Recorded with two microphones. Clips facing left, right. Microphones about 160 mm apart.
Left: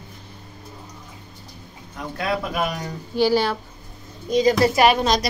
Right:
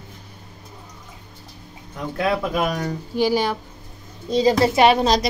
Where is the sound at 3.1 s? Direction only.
15° right (ahead or behind).